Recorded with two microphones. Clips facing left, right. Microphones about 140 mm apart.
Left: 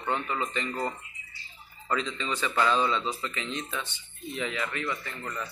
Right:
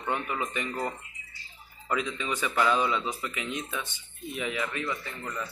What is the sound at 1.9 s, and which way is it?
A man's voice, 10° right (ahead or behind).